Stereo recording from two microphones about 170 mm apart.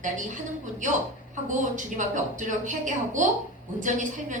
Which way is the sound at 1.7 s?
50° right (ahead or behind).